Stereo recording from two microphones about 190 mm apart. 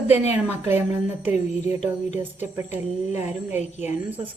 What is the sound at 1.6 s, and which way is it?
Speech, 35° left (ahead or behind).